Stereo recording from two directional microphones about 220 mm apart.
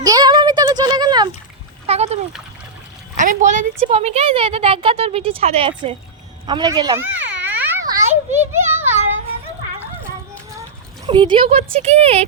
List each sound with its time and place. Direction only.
0.0 s a sound: 15° right (ahead or behind)
1.9 s splash: 30° right (ahead or behind)
3.2 s a woman's voice: 35° right (ahead or behind); by 7.1 s 15° right (ahead or behind)
7.2 s children playing: 10° right (ahead or behind)
11.0 s speech: 20° right (ahead or behind)